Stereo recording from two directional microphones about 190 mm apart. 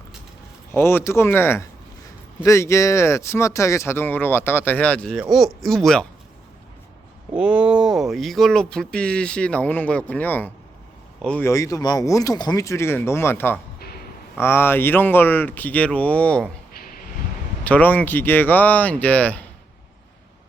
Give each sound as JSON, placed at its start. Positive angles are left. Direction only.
{"t": 0.7, "sound": "speech", "side_deg": 10}
{"t": 7.3, "sound": "speech", "side_deg": -5}
{"t": 13.7, "sound": "a sound", "side_deg": 55}
{"t": 14.3, "sound": "speech", "side_deg": 10}
{"t": 17.6, "sound": "speech", "side_deg": 10}